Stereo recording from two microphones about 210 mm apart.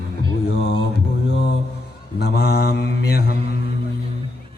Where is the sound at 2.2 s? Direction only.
50° left (ahead or behind).